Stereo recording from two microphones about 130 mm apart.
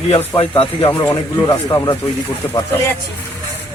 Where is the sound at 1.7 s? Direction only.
25° left (ahead or behind).